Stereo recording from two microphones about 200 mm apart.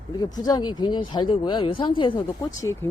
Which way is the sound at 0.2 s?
20° left (ahead or behind).